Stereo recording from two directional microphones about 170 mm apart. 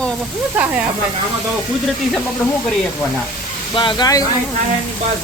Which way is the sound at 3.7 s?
25° left (ahead or behind).